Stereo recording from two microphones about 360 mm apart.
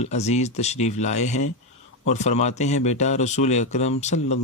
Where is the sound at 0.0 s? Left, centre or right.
Centre.